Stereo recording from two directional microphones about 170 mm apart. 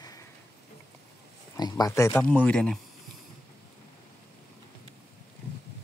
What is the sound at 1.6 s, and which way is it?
Speech, 20° left (ahead or behind).